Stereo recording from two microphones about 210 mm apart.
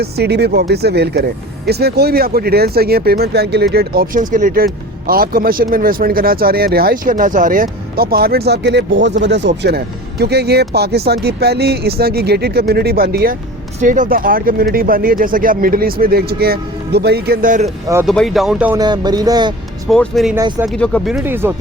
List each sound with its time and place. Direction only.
0.0 s speech: 50° right (ahead or behind)
18.0 s speech: centre (ahead or behind)
18.8 s speech: 20° right (ahead or behind)
19.9 s speech: centre (ahead or behind)
20.3 s speech: 10° right (ahead or behind)
20.7 s speech: 5° left (ahead or behind); by 21.5 s 10° right (ahead or behind)